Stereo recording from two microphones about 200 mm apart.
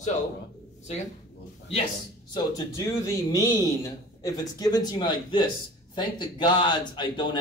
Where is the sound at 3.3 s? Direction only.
15° left (ahead or behind).